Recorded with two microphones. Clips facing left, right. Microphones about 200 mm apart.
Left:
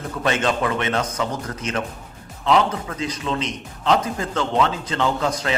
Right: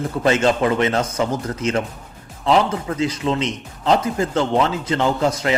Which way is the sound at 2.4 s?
30° right (ahead or behind).